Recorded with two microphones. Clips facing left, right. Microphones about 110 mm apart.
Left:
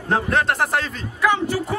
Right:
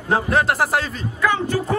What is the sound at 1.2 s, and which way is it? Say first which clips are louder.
Speech: even; 15° left (ahead or behind).